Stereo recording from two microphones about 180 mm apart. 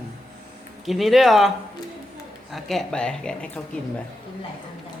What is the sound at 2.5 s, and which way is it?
Speech, centre (ahead or behind).